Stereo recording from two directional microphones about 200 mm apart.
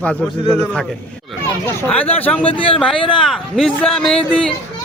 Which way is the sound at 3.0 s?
25° left (ahead or behind).